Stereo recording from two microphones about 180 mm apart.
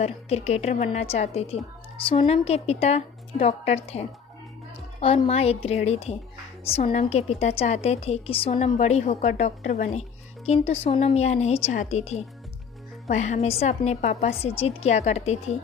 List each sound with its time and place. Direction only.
0.0 s a woman's voice: 35° left (ahead or behind)